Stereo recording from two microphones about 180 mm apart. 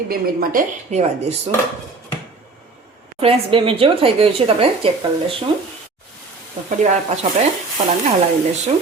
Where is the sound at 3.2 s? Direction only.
30° right (ahead or behind).